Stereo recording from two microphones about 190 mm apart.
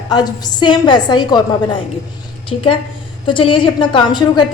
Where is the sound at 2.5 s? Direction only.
30° left (ahead or behind).